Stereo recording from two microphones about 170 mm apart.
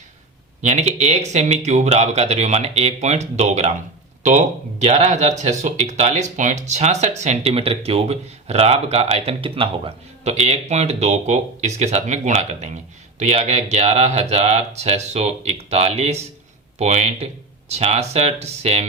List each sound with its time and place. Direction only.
0.6 s speech: 40° right (ahead or behind)